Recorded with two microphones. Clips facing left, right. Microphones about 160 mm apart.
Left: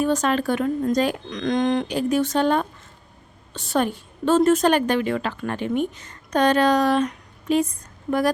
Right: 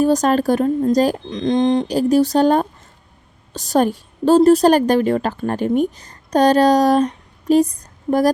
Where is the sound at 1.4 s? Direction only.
25° right (ahead or behind).